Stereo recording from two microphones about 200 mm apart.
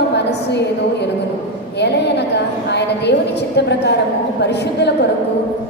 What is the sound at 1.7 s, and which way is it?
A woman's voice, 55° left (ahead or behind).